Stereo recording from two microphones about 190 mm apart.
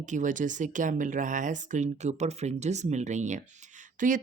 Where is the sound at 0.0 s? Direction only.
40° right (ahead or behind).